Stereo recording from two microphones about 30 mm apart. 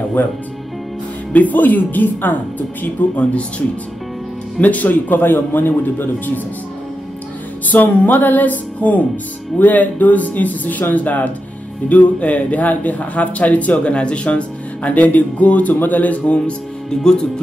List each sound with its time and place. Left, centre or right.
0.2 s speech: left
1.3 s speech: left
3.2 s speech: left
4.6 s speech: left
7.6 s speech: left
13.9 s speech: left
17.0 s speech: left